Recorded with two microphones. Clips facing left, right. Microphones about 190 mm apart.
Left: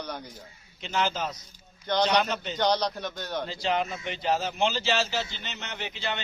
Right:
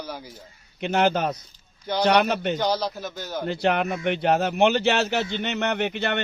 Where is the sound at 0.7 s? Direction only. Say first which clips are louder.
Right 7 dB; 60° right (ahead or behind).